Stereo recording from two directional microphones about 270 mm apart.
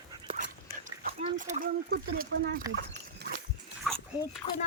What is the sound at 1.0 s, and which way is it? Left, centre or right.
Speech, right.